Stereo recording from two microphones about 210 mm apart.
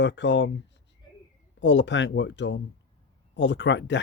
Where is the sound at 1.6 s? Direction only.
60° left (ahead or behind).